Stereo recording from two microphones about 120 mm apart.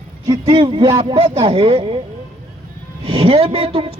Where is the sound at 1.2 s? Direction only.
55° right (ahead or behind).